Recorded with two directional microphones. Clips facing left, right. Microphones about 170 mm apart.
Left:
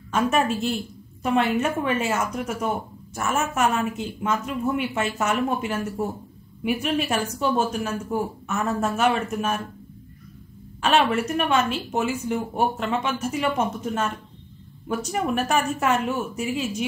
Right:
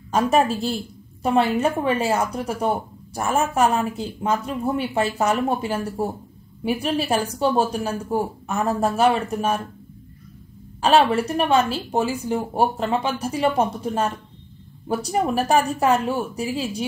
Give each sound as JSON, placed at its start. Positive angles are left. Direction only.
{"t": 0.1, "sound": "speech", "side_deg": -35}
{"t": 10.8, "sound": "speech", "side_deg": -35}